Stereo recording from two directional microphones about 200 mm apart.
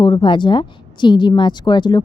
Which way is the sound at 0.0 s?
25° left (ahead or behind).